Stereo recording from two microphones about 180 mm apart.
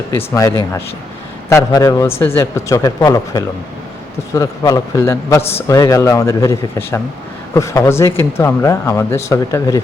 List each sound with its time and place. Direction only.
0.1 s speech: 15° left (ahead or behind)
5.4 s a man's voice: 35° left (ahead or behind)
5.6 s speech: 20° left (ahead or behind)